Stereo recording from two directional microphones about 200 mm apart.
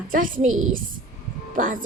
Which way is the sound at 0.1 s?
45° right (ahead or behind).